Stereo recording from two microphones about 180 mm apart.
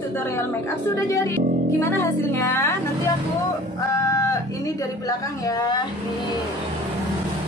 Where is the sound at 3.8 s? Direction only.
20° left (ahead or behind).